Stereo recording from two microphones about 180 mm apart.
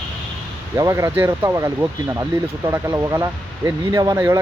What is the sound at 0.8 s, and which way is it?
Speech, 20° right (ahead or behind).